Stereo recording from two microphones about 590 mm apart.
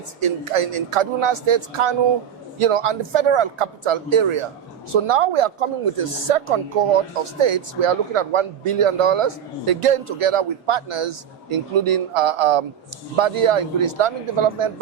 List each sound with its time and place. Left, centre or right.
0.2 s speech: right